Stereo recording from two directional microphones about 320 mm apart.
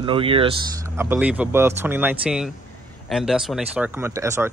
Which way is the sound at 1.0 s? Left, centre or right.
Centre.